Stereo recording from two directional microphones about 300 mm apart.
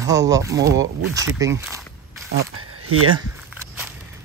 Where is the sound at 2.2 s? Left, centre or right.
Right.